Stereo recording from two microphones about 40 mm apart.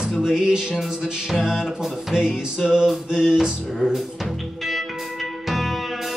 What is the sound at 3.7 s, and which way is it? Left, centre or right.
Music, centre.